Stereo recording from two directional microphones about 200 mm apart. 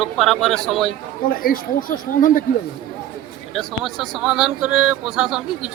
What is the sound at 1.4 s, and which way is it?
Speech, 45° left (ahead or behind).